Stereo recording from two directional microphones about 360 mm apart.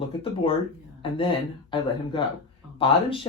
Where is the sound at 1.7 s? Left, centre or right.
Centre.